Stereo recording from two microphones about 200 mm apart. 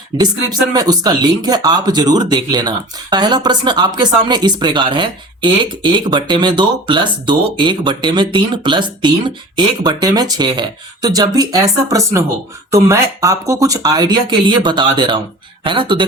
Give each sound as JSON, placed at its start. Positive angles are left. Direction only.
{"t": 0.1, "sound": "speech", "side_deg": -20}